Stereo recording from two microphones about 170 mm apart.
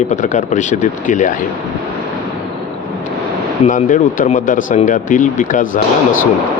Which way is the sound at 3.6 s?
50° left (ahead or behind).